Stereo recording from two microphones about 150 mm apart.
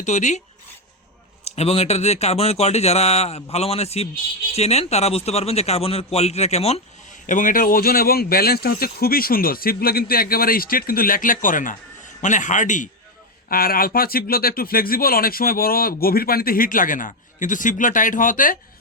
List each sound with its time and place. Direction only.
0.0 s speech: 50° left (ahead or behind)
1.5 s a man's voice: 45° left (ahead or behind)
13.5 s a man's voice: 80° left